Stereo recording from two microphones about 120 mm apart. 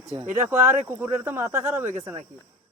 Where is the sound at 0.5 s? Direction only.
20° right (ahead or behind).